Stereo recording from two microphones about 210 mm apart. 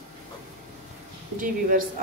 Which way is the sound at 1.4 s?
40° right (ahead or behind).